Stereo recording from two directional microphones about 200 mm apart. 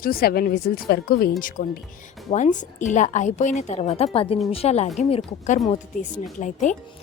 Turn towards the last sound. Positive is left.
turn(degrees=40)  # may be behind; listen again after turning